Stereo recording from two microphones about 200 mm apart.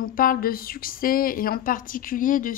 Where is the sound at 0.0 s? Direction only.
45° left (ahead or behind).